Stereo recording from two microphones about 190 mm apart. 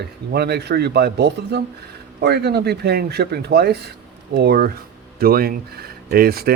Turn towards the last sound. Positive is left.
turn(degrees=-50)  # may be behind; listen again after turning